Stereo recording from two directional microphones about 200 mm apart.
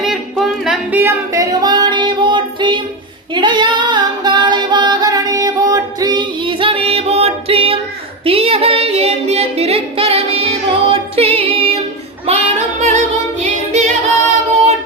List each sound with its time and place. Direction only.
0.0 s singing: centre (ahead or behind); by 2.8 s 25° right (ahead or behind)
3.3 s female singing: 25° right (ahead or behind)
8.2 s singing: 30° right (ahead or behind)
11.3 s music: 30° right (ahead or behind)
12.2 s child singing: 30° right (ahead or behind)